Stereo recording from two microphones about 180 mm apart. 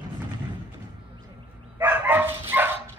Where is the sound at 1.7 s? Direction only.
10° right (ahead or behind).